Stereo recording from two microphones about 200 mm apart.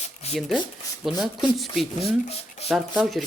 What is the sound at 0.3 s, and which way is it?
Speech, centre (ahead or behind).